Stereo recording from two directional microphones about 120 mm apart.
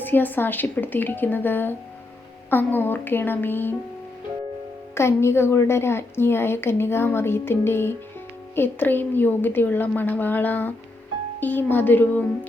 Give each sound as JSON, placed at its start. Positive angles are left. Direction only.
{"t": 0.0, "sound": "a woman's voice", "side_deg": 15}
{"t": 4.9, "sound": "a woman's voice", "side_deg": 20}